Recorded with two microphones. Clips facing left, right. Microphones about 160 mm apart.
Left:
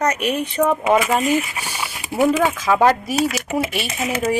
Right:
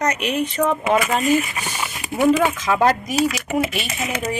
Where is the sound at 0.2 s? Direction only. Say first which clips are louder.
Left 1 dB; 50° left (ahead or behind).